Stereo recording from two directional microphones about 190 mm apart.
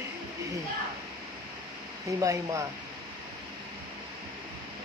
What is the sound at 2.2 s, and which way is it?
Speech, 15° right (ahead or behind).